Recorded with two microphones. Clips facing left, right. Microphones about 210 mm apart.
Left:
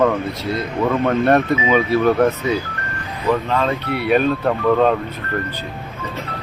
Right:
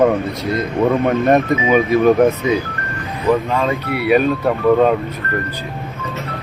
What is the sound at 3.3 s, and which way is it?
Speech, 10° right (ahead or behind).